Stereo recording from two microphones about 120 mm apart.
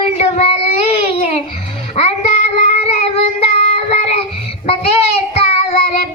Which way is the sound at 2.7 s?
55° left (ahead or behind).